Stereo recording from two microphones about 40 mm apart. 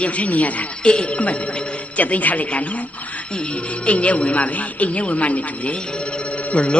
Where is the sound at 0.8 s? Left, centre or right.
Left.